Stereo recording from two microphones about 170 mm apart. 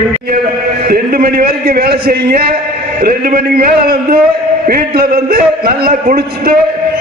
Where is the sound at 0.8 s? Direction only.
60° right (ahead or behind).